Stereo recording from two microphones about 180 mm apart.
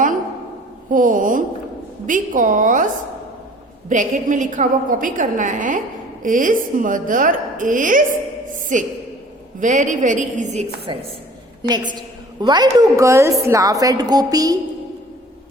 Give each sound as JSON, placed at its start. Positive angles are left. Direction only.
{"t": 0.9, "sound": "a woman's voice", "side_deg": -50}
{"t": 3.8, "sound": "a woman's voice", "side_deg": -45}
{"t": 11.9, "sound": "a woman's voice", "side_deg": -25}